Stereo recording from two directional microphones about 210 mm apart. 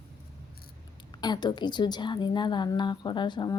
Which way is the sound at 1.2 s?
20° left (ahead or behind).